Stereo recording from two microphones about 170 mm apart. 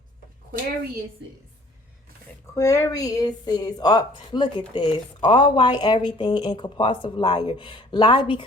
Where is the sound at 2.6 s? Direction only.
20° left (ahead or behind).